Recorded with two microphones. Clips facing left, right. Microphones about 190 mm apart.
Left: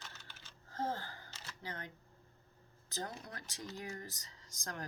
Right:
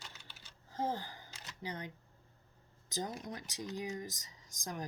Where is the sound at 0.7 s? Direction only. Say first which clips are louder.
Right 2 dB; 15° right (ahead or behind).